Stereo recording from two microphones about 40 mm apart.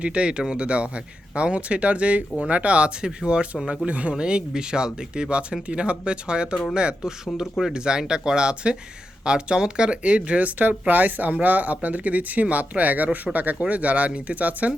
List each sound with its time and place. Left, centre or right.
0.0 s speech: right
3.8 s speech: right
4.1 s speech: right